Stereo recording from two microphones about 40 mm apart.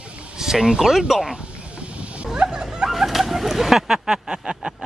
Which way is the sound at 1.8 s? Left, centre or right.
Right.